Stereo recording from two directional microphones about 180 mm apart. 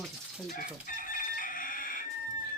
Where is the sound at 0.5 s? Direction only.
50° left (ahead or behind).